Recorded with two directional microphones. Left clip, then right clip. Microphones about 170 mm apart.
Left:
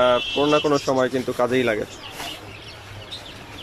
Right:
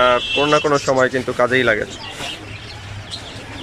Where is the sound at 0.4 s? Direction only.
Centre (ahead or behind).